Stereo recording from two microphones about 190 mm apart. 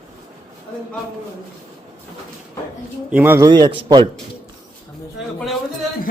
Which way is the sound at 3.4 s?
20° right (ahead or behind).